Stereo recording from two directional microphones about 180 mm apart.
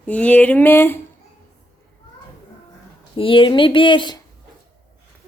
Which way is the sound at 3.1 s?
30° left (ahead or behind).